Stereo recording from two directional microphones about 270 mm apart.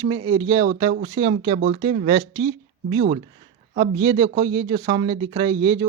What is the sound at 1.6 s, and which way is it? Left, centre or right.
Speech, right.